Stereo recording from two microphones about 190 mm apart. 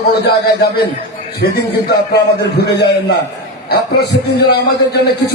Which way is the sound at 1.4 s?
60° left (ahead or behind).